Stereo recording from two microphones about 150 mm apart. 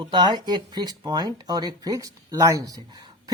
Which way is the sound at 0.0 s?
30° right (ahead or behind).